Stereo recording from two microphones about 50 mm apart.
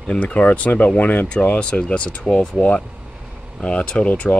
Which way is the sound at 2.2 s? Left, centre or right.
Centre.